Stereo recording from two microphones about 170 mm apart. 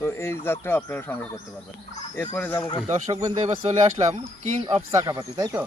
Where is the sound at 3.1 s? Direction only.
20° right (ahead or behind).